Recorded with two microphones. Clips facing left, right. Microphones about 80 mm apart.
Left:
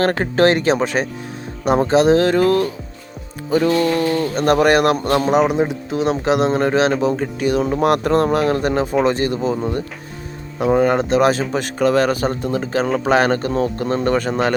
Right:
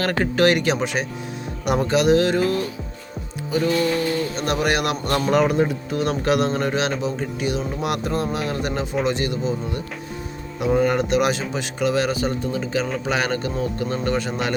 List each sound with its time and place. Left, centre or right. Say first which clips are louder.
0.0 s speech: left 4 dB; left
1.6 s speech: left 5 dB; left
5.0 s speech: left 4 dB; left
6.5 s speech: left 6 dB; left